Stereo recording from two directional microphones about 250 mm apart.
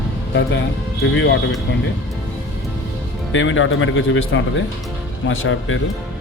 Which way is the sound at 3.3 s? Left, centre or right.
Left.